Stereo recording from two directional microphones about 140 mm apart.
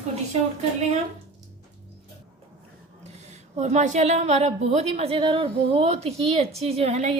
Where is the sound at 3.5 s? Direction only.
55° right (ahead or behind).